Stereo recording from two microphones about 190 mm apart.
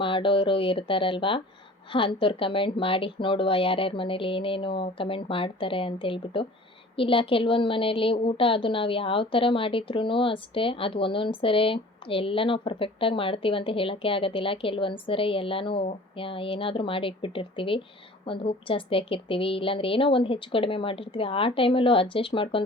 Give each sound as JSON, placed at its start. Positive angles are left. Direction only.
{"t": 0.0, "sound": "a woman's voice", "side_deg": 25}